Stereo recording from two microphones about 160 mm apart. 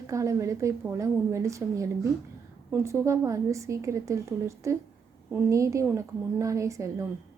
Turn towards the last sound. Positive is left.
turn(degrees=-20)  # may be behind; listen again after turning